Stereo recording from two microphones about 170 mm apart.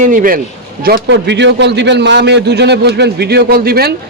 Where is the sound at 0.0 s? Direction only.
50° right (ahead or behind).